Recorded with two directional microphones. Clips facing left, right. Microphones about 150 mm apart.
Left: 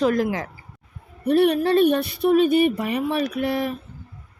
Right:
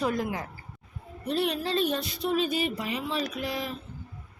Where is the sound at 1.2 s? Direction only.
60° left (ahead or behind).